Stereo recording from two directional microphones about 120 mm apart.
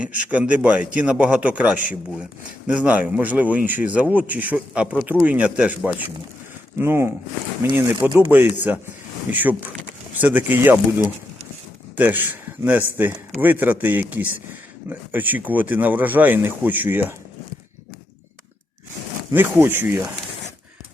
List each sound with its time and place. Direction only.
0.3 s speech: 10° right (ahead or behind)
11.9 s speech: 15° right (ahead or behind)
19.3 s speech: 20° right (ahead or behind)